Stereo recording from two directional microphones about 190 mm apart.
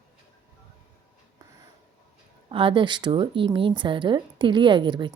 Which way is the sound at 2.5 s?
25° right (ahead or behind).